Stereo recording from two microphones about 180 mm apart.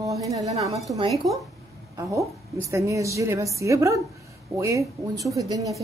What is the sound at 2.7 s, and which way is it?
Speech, 15° right (ahead or behind).